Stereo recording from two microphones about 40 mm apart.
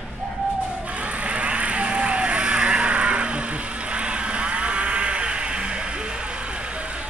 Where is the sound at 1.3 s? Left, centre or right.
Right.